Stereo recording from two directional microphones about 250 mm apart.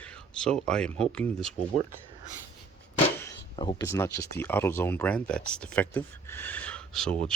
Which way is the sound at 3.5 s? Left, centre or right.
Centre.